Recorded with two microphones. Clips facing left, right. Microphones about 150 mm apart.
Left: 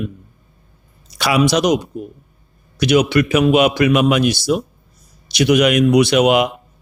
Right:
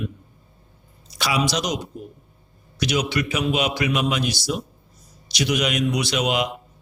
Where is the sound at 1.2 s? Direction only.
60° left (ahead or behind).